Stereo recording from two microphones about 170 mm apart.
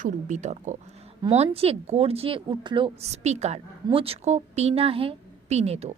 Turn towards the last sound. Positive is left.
turn(degrees=-40)  # may be behind; listen again after turning